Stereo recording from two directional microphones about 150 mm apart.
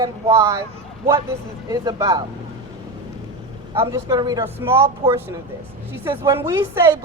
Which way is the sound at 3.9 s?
25° right (ahead or behind).